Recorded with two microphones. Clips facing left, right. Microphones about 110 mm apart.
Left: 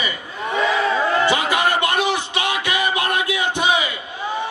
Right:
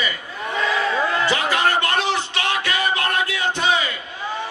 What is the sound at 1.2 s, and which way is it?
Music, 15° left (ahead or behind).